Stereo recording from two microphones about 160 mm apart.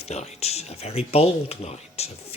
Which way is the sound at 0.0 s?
45° left (ahead or behind).